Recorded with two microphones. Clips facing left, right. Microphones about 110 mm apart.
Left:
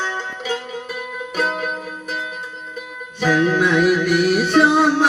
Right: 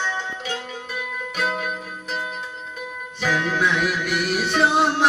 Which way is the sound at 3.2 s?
40° left (ahead or behind).